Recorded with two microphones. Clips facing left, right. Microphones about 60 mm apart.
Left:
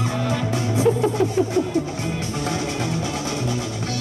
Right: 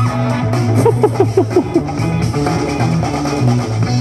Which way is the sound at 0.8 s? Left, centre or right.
Right.